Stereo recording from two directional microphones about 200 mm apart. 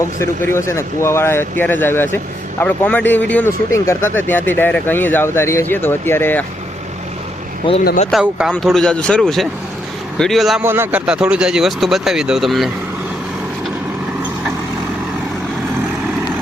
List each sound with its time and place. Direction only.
0.2 s speech: 15° left (ahead or behind)
7.6 s speech: 25° left (ahead or behind)
8.1 s speech: 5° right (ahead or behind)
10.6 s speech: 10° right (ahead or behind)